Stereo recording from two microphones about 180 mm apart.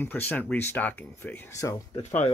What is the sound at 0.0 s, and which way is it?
Speech, 10° left (ahead or behind).